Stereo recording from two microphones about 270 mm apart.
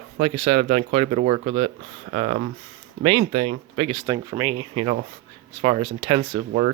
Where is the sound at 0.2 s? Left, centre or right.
Right.